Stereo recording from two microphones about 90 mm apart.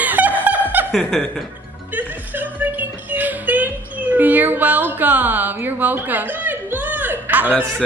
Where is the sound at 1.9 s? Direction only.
20° right (ahead or behind).